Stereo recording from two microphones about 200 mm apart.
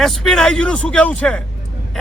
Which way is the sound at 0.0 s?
Centre (ahead or behind).